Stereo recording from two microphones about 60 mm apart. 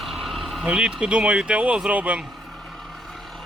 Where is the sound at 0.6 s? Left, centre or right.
Centre.